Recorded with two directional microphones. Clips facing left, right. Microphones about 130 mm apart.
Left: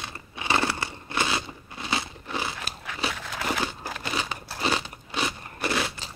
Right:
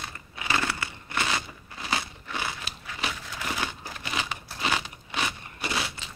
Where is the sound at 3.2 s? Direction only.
85° left.